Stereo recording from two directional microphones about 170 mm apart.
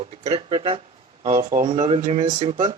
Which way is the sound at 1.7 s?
35° right (ahead or behind).